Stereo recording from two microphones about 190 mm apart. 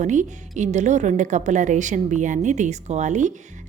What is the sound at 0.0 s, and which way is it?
A woman's voice, 40° right (ahead or behind).